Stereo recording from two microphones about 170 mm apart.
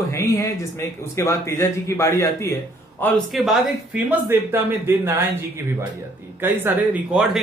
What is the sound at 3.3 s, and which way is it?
Speech, centre (ahead or behind).